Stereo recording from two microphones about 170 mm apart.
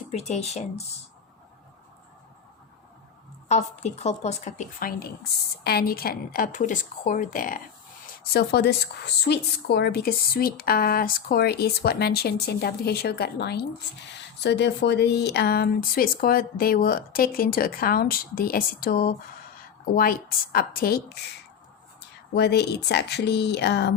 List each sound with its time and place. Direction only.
0.1 s speech: 40° left (ahead or behind)
3.5 s speech: 40° left (ahead or behind)
8.3 s a woman's voice: 70° left (ahead or behind)
14.1 s speech: 90° left; by 21.2 s 65° left (ahead or behind)
22.4 s a woman's voice: 75° left (ahead or behind)